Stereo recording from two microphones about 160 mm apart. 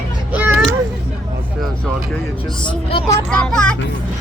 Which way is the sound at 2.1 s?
5° left (ahead or behind).